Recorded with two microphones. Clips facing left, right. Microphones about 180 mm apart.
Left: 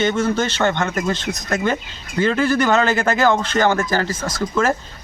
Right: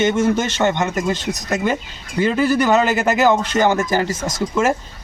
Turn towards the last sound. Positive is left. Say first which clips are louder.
# right 1 dB
turn(degrees=-15)  # may be behind; listen again after turning